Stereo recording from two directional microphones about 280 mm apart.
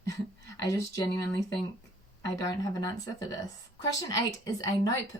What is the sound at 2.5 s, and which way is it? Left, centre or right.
Speech, centre.